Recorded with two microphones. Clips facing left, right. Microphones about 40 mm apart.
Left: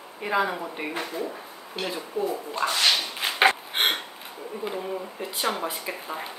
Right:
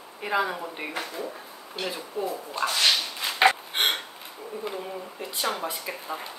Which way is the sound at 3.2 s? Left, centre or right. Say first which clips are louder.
Left 2 dB; left.